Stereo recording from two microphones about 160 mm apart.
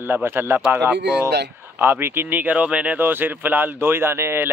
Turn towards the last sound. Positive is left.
turn(degrees=-15)  # may be behind; listen again after turning